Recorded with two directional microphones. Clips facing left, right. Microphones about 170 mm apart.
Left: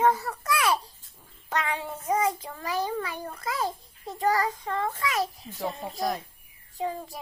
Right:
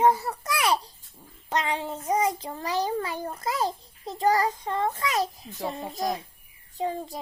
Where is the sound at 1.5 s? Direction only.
25° right (ahead or behind).